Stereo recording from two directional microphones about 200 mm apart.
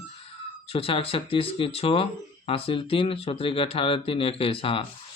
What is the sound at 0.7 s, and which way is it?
Speech, 30° left (ahead or behind).